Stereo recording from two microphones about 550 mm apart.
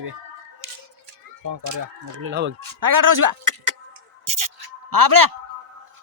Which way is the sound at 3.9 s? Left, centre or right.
Right.